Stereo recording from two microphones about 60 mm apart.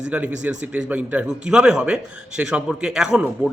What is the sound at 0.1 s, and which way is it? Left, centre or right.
A man's voice, right.